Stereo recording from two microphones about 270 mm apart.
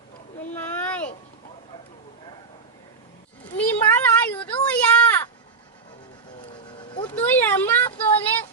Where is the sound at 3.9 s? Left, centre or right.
Centre.